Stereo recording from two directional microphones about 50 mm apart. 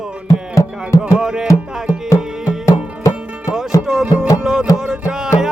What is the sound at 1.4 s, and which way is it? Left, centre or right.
Music, left.